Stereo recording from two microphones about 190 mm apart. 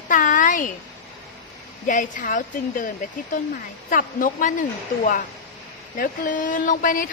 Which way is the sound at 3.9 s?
45° left (ahead or behind).